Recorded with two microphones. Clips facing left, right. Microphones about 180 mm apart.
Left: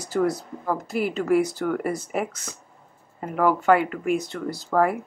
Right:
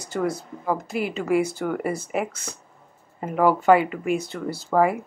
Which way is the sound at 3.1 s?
10° right (ahead or behind).